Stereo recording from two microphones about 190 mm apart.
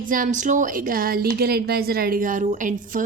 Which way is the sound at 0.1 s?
45° right (ahead or behind).